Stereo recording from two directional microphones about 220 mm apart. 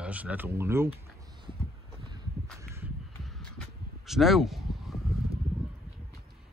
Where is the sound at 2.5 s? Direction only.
10° right (ahead or behind).